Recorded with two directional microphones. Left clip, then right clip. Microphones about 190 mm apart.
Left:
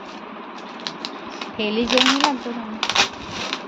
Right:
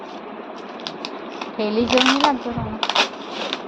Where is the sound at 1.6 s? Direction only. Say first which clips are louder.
Right 1 dB; 5° right (ahead or behind).